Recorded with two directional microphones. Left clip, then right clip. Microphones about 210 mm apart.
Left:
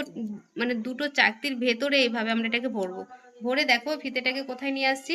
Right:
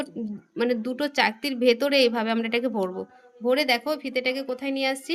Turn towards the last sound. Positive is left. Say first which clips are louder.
# even
turn(degrees=-50)  # may be behind; listen again after turning